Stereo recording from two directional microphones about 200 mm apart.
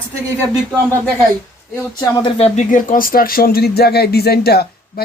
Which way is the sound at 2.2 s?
25° left (ahead or behind).